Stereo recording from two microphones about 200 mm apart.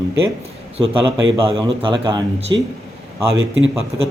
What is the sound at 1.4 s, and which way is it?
A man's voice, 25° right (ahead or behind).